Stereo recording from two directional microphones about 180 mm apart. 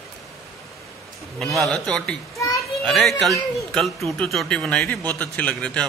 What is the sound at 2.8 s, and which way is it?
Speech, centre (ahead or behind).